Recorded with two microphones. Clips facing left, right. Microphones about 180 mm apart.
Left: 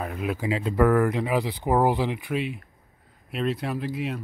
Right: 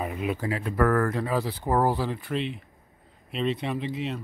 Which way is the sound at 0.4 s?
20° left (ahead or behind).